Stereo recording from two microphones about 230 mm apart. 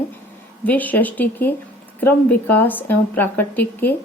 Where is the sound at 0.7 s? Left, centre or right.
Centre.